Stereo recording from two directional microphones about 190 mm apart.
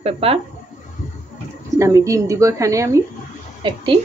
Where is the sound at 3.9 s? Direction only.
35° right (ahead or behind).